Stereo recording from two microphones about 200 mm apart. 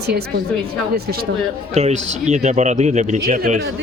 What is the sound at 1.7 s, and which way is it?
Speech, 35° right (ahead or behind).